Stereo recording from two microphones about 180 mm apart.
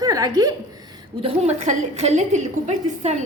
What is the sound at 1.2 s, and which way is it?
A woman's voice, 35° right (ahead or behind).